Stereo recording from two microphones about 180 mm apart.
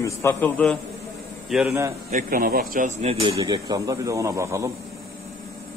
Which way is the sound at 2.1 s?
55° right (ahead or behind).